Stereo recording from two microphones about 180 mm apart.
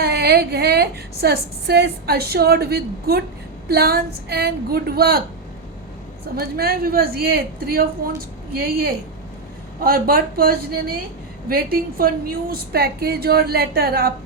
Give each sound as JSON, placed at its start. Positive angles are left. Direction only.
{"t": 0.0, "sound": "a woman's voice", "side_deg": -65}
{"t": 6.3, "sound": "a woman's voice", "side_deg": -60}